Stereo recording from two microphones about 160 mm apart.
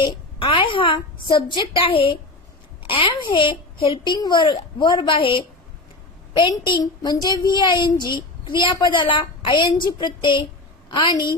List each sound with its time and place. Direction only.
0.0 s a woman's voice: 30° left (ahead or behind)